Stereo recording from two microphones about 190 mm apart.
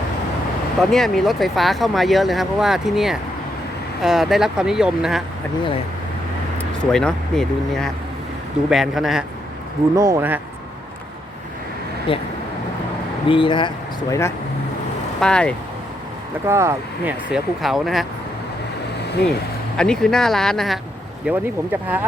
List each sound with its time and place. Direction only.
0.8 s speech: centre (ahead or behind)
6.6 s speech: 5° left (ahead or behind)
9.9 s speech: 15° right (ahead or behind)
12.1 s speech: 30° left (ahead or behind)
15.2 s speech: 5° left (ahead or behind)
16.5 s speech: 15° right (ahead or behind)
17.3 s speech: centre (ahead or behind)
19.3 s speech: 5° left (ahead or behind)
21.2 s speech: 10° right (ahead or behind)